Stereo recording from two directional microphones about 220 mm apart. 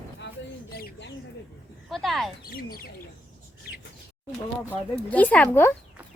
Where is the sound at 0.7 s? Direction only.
45° left (ahead or behind).